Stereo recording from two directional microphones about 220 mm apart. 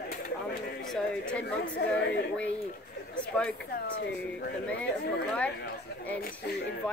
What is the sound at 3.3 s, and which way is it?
Speech, 5° left (ahead or behind).